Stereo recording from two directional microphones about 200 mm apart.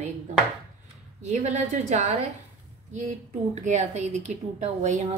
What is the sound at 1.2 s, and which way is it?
Speech, 35° right (ahead or behind).